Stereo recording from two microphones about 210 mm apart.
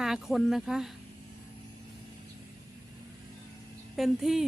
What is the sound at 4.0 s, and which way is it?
Speech, centre (ahead or behind).